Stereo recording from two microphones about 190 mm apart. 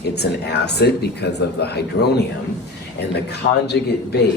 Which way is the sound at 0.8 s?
60° left (ahead or behind).